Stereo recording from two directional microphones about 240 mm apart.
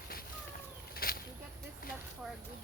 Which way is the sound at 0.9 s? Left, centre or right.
Left.